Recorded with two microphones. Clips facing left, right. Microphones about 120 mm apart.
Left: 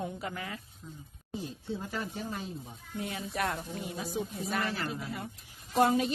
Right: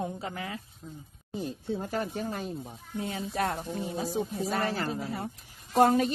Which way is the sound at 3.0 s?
30° right (ahead or behind).